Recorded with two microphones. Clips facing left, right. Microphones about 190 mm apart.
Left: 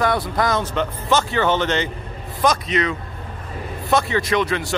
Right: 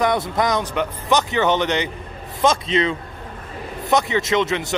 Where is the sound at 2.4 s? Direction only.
25° right (ahead or behind).